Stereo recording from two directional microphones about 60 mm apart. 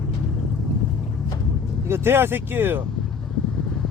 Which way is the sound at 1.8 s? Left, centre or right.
Right.